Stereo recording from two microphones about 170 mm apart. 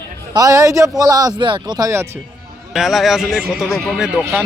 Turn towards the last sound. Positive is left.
turn(degrees=-5)  # may be behind; listen again after turning